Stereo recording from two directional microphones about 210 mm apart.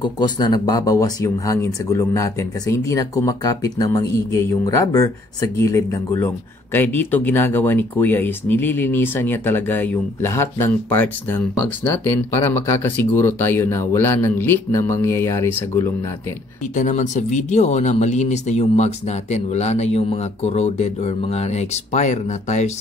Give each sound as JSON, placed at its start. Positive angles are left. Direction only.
{"t": 0.0, "sound": "speech", "side_deg": 20}
{"t": 16.7, "sound": "speech", "side_deg": 35}